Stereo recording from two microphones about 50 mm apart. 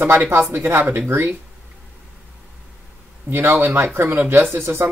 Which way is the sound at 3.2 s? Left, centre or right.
Right.